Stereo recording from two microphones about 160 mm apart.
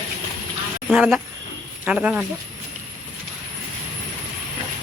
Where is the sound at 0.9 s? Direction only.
5° right (ahead or behind).